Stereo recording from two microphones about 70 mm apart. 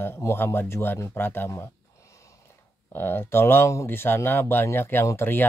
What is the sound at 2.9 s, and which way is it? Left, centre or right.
Speech, left.